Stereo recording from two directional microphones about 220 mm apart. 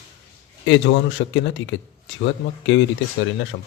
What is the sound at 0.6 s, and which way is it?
Speech, 55° left (ahead or behind).